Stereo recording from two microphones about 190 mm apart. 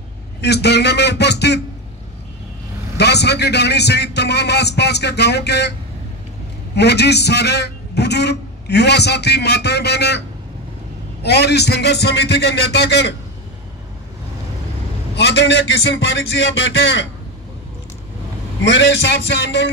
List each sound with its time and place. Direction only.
0.4 s a man's voice: 60° left (ahead or behind)
3.0 s a man's voice: 60° left (ahead or behind)
11.2 s a man's voice: 60° left (ahead or behind)
15.1 s a man's voice: 65° left (ahead or behind)
18.6 s a man's voice: 70° left (ahead or behind)